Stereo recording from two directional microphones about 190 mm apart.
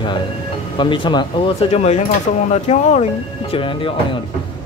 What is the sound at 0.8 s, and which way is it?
Speech, 25° left (ahead or behind).